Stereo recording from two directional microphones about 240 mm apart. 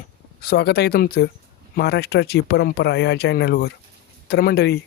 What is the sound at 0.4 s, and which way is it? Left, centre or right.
Speech, left.